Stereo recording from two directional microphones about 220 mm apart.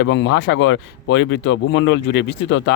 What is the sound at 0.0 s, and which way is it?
Speech, 55° left (ahead or behind).